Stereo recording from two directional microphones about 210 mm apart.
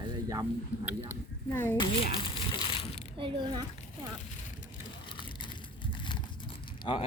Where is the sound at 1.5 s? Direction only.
10° left (ahead or behind).